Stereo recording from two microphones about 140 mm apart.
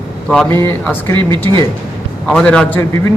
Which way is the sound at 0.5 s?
15° left (ahead or behind).